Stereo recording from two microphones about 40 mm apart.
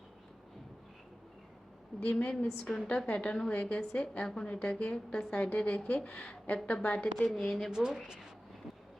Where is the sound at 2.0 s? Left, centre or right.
Left.